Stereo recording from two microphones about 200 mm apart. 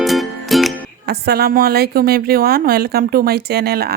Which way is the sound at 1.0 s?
50° right (ahead or behind).